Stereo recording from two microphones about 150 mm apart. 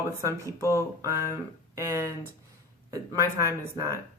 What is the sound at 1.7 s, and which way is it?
Speech, 20° right (ahead or behind).